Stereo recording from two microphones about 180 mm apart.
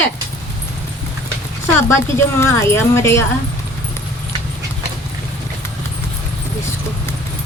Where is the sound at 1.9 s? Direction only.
15° left (ahead or behind).